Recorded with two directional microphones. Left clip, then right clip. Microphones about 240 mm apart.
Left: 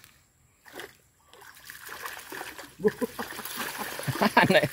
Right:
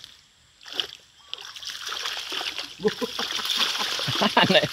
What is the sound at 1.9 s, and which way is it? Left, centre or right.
Speech, centre.